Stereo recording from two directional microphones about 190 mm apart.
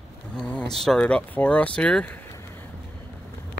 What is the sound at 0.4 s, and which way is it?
Speech, 5° left (ahead or behind).